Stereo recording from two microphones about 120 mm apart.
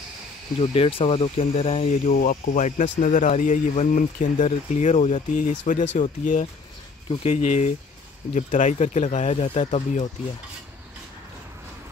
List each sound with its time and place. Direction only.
0.6 s speech: 50° left (ahead or behind); by 6.4 s 90° left
7.1 s speech: 65° left (ahead or behind)
8.4 s speech: 90° left; by 10.0 s 75° left (ahead or behind)